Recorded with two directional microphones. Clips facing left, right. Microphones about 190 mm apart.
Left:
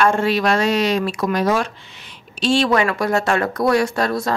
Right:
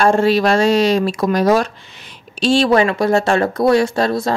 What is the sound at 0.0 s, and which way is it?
Speech, 35° right (ahead or behind).